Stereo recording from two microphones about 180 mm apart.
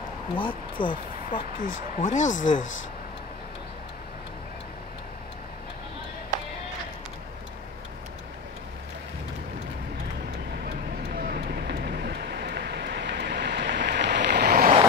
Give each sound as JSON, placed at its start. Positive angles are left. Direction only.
{"t": 0.4, "sound": "speech", "side_deg": 25}
{"t": 1.3, "sound": "speech", "side_deg": 45}
{"t": 11.1, "sound": "vehicle", "side_deg": -55}